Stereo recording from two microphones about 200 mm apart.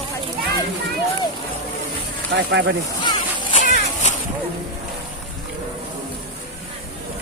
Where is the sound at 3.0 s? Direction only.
25° left (ahead or behind).